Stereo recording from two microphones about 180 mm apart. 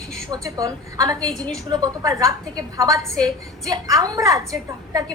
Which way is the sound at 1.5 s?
20° right (ahead or behind).